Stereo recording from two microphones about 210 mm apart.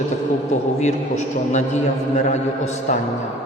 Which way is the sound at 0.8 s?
35° left (ahead or behind).